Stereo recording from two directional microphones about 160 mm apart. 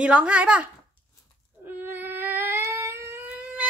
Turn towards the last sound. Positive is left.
turn(degrees=-10)  # may be behind; listen again after turning